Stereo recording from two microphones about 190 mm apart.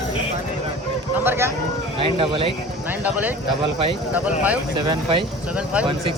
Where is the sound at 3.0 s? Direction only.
10° right (ahead or behind).